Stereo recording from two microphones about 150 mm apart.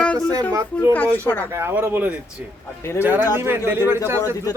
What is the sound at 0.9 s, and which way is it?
Speech, 10° left (ahead or behind).